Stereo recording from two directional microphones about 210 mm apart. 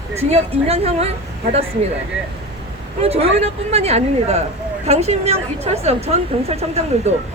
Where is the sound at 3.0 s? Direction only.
30° right (ahead or behind).